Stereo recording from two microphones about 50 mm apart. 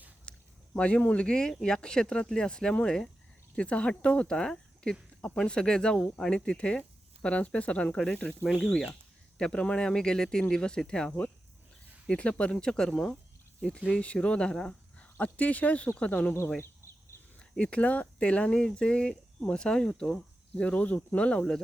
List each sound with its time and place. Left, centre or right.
0.3 s speech: left
8.6 s speech: centre
12.1 s speech: left
14.0 s speech: left
17.6 s speech: left